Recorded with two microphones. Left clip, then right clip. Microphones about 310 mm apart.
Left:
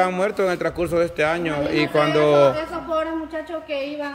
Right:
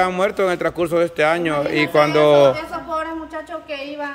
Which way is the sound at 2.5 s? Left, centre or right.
Centre.